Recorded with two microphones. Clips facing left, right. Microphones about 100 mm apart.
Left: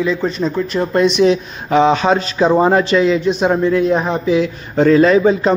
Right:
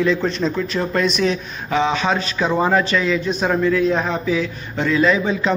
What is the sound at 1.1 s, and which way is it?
Speech, 30° left (ahead or behind).